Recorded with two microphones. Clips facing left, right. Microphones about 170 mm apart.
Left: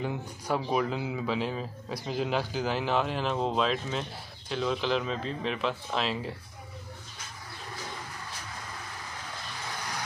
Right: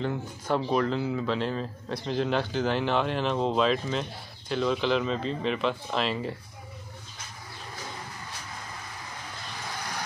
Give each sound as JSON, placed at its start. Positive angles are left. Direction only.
{"t": 0.0, "sound": "speech", "side_deg": 10}